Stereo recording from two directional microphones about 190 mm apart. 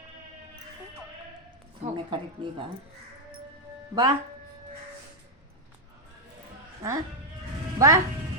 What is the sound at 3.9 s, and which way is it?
Speech, 20° right (ahead or behind).